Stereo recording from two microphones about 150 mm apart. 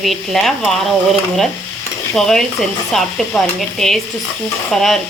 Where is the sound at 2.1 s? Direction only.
Centre (ahead or behind).